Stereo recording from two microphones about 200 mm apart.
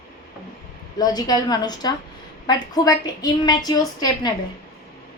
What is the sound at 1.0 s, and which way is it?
A woman's voice, 20° left (ahead or behind).